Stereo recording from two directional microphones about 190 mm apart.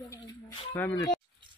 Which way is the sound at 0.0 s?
20° left (ahead or behind).